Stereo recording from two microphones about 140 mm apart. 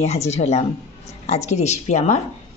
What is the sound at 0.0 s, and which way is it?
Speech, 50° left (ahead or behind).